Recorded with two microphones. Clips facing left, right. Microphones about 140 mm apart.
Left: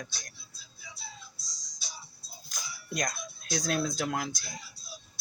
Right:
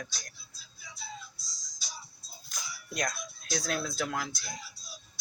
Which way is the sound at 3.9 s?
25° left (ahead or behind).